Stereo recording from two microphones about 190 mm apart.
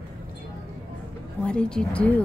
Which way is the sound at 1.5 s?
5° left (ahead or behind).